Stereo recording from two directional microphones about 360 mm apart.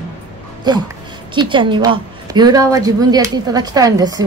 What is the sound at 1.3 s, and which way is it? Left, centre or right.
A woman's voice, centre.